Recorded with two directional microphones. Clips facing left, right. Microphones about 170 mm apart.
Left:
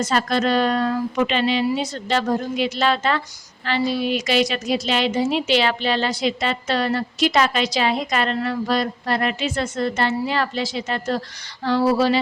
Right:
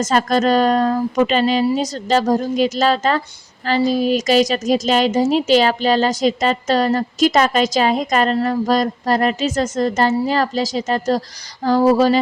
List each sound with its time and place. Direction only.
0.0 s a woman's voice: 45° right (ahead or behind)